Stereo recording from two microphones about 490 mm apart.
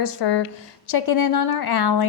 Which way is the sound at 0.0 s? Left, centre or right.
Left.